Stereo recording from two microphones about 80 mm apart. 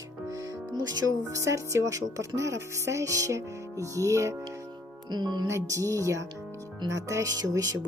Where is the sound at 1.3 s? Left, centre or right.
Right.